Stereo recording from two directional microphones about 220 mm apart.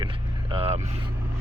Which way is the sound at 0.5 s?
25° right (ahead or behind).